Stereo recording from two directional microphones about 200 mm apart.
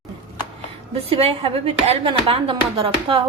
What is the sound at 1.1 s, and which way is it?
Speech, 30° right (ahead or behind).